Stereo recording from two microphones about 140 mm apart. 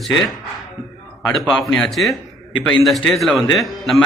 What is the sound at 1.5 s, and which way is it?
Speech, 5° left (ahead or behind).